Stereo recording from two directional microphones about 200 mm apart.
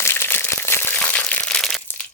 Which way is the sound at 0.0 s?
10° left (ahead or behind).